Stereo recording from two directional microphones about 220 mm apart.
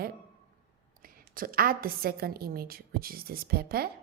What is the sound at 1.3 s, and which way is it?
A woman's voice, 40° right (ahead or behind).